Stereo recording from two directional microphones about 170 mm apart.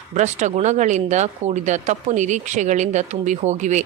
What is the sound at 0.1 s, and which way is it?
Speech, 45° right (ahead or behind).